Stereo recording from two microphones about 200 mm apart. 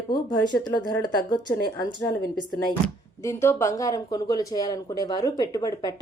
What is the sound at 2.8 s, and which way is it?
Speech, 15° left (ahead or behind).